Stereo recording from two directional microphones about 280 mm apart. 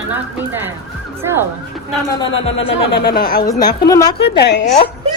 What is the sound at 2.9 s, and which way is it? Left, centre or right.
Speech, left.